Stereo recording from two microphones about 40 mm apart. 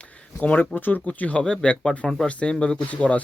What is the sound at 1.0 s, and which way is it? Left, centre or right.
Speech, left.